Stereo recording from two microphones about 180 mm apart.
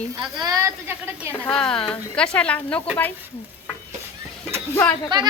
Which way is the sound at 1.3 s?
5° left (ahead or behind).